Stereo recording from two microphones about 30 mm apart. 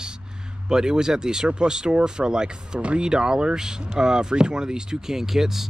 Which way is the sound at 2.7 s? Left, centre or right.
Right.